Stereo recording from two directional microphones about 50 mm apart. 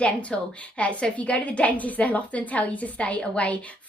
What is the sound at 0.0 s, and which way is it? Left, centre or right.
A woman's voice, left.